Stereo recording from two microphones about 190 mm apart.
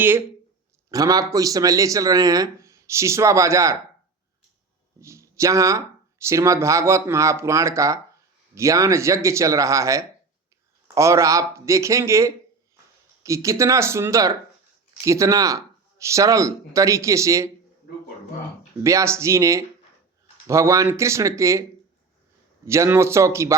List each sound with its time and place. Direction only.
0.9 s speech: 20° right (ahead or behind)
4.9 s speech: 15° right (ahead or behind)
18.8 s speech: 15° right (ahead or behind)
22.6 s speech: 15° right (ahead or behind)